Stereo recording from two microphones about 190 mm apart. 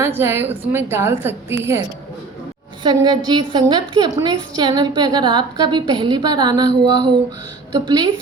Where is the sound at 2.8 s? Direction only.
20° right (ahead or behind).